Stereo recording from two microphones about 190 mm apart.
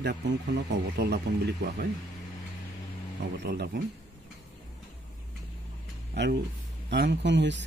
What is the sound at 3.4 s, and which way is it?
Speech, 60° right (ahead or behind).